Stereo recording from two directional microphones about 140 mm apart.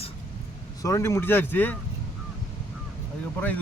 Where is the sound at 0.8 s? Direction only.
20° left (ahead or behind).